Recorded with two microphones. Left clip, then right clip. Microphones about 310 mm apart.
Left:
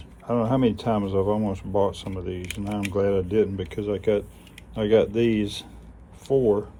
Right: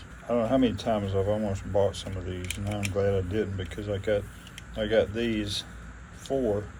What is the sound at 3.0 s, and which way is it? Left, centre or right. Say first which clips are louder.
Speech: left 6 dB; centre.